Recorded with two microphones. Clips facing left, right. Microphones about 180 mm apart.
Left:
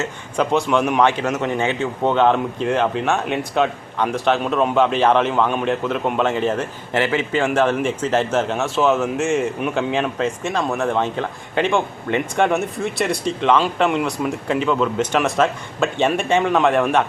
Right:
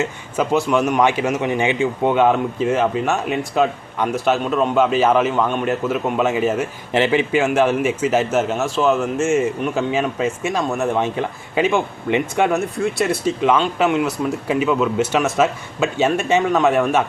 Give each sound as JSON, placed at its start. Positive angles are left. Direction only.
{"t": 0.0, "sound": "a man's voice", "side_deg": -5}
{"t": 6.9, "sound": "a man's voice", "side_deg": -20}